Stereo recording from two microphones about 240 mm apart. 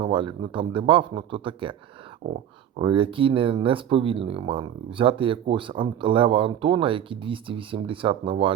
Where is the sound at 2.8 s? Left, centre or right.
Right.